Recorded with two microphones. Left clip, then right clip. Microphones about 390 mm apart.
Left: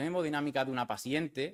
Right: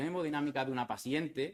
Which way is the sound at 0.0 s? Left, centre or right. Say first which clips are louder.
Left 2 dB; left.